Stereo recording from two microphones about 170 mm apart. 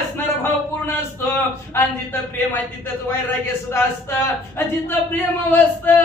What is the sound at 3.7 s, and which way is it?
A man's voice, 15° left (ahead or behind).